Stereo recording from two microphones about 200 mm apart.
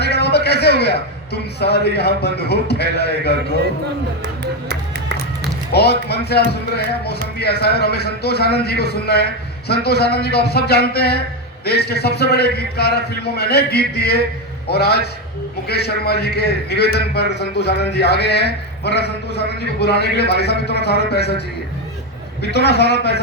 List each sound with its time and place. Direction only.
0.0 s a man's voice: 55° left (ahead or behind)
5.7 s a man's voice: 55° left (ahead or behind)
22.5 s a man's voice: 55° left (ahead or behind)